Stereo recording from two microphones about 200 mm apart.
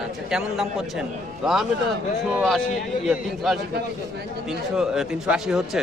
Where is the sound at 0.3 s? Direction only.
Centre (ahead or behind).